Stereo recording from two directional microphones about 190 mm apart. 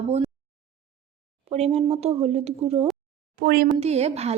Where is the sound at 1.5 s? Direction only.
35° right (ahead or behind).